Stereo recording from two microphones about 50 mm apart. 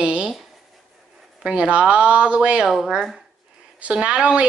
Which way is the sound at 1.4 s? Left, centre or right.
Right.